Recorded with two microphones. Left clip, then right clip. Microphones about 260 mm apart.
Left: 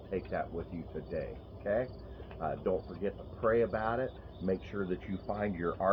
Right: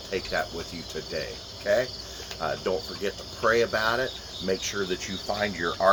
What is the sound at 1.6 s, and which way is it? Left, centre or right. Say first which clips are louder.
Cricket: right 9 dB; centre.